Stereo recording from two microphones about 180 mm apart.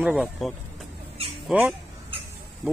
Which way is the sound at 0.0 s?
Centre (ahead or behind).